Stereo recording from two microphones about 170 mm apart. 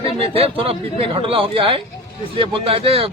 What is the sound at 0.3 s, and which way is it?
A man's voice, 35° right (ahead or behind).